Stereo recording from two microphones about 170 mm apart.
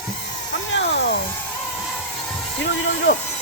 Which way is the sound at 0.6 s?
90° left.